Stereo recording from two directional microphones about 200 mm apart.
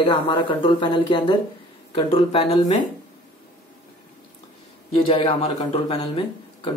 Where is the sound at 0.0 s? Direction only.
25° left (ahead or behind).